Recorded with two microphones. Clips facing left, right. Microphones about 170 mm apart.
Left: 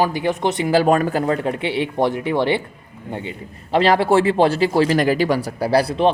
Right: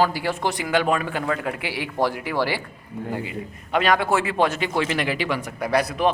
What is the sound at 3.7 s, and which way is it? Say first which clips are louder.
Speech: left 5 dB; 30° left (ahead or behind).